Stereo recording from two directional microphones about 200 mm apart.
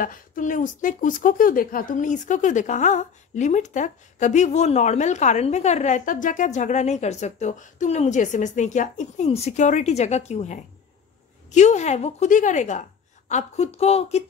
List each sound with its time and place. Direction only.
0.0 s a woman's voice: 40° left (ahead or behind)